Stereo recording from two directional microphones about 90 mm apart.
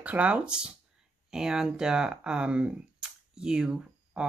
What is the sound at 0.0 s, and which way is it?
Speech, 15° right (ahead or behind).